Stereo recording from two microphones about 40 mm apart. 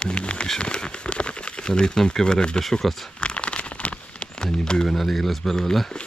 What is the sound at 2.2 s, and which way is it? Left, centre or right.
Speech, centre.